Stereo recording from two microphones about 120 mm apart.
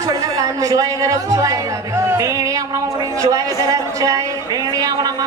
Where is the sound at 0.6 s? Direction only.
30° right (ahead or behind).